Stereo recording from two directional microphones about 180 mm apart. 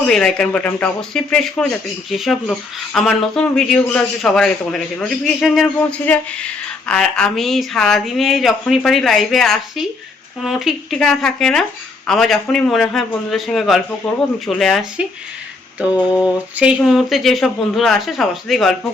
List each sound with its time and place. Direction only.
0.0 s speech: 5° left (ahead or behind)
16.2 s speech: 5° right (ahead or behind)